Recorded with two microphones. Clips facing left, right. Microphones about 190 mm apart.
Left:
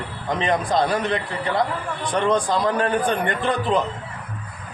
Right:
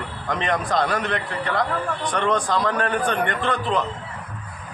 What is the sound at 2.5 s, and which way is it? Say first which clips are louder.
A man's voice: left 2 dB; 30° left (ahead or behind).